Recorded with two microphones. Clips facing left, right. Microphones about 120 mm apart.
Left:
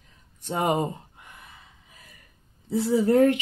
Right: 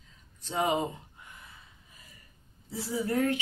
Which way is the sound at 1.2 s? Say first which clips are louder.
Left 3 dB; 70° left (ahead or behind).